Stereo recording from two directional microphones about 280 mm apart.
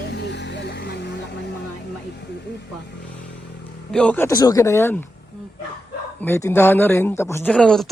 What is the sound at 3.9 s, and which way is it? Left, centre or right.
Speech, centre.